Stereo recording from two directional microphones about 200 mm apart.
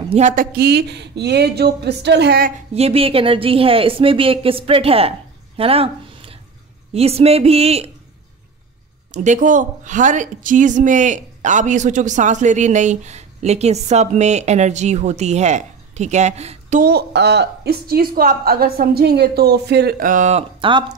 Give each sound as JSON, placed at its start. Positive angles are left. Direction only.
{"t": 0.1, "sound": "speech", "side_deg": -40}
{"t": 2.7, "sound": "a woman's voice", "side_deg": -30}
{"t": 5.6, "sound": "a sound", "side_deg": -30}
{"t": 6.9, "sound": "speech", "side_deg": -30}
{"t": 9.1, "sound": "speech", "side_deg": -40}
{"t": 16.8, "sound": "a woman's voice", "side_deg": -55}